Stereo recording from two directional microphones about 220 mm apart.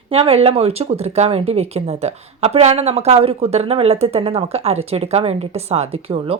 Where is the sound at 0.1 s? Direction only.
25° right (ahead or behind).